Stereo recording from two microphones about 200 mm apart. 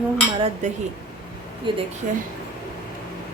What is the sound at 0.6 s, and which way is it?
Speech, 35° right (ahead or behind).